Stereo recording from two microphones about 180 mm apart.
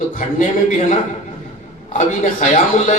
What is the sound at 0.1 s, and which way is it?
A man's voice, 50° left (ahead or behind).